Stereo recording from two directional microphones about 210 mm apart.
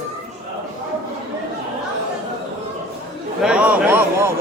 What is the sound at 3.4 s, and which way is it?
Speech, 5° right (ahead or behind).